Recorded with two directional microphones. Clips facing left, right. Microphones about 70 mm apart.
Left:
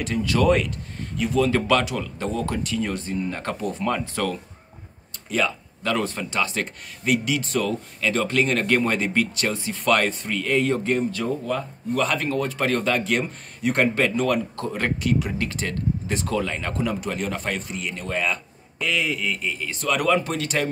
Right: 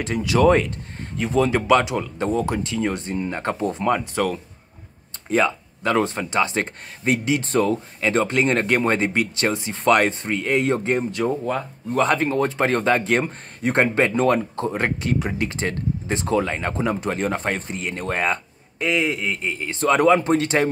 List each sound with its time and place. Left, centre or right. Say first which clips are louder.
0.4 s speech: right 4 dB; right
9.1 s speech: right 2 dB; centre